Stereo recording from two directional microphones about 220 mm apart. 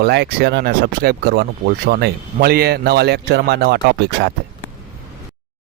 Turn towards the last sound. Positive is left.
turn(degrees=-45)  # may be behind; listen again after turning